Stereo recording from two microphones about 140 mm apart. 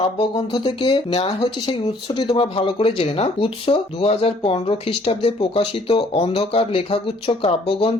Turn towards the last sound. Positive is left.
turn(degrees=45)  # may be behind; listen again after turning